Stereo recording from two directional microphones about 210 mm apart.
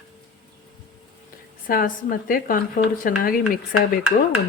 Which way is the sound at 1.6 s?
40° left (ahead or behind).